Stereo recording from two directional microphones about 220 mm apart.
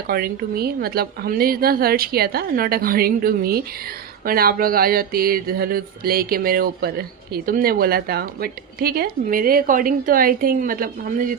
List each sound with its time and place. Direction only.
0.1 s a woman's voice: 45° right (ahead or behind)